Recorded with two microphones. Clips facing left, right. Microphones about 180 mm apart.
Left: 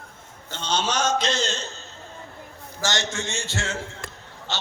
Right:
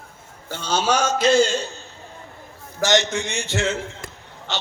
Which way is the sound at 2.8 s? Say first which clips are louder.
Right 8 dB; 20° right (ahead or behind).